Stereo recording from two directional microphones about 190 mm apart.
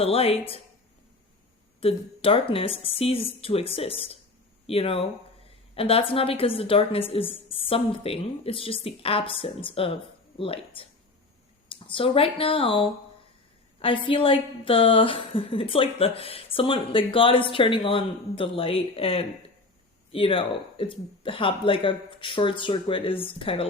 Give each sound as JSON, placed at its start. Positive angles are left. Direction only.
{"t": 0.0, "sound": "speech", "side_deg": 30}
{"t": 1.8, "sound": "a woman's voice", "side_deg": 30}